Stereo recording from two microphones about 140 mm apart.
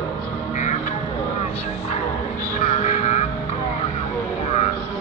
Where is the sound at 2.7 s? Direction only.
55° left (ahead or behind).